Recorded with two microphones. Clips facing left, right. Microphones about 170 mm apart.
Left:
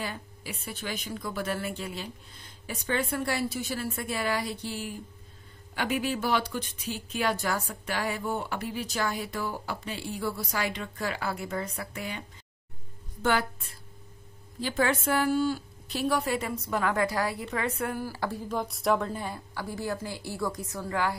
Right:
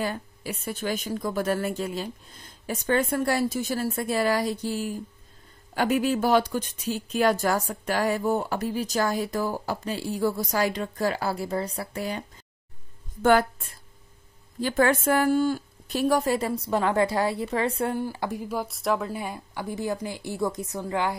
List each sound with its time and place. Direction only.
0.0 s a woman's voice: 45° right (ahead or behind)
13.2 s a woman's voice: 50° right (ahead or behind); by 21.2 s 20° right (ahead or behind)